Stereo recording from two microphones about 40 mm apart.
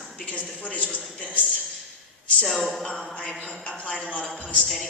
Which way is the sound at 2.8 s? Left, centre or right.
Left.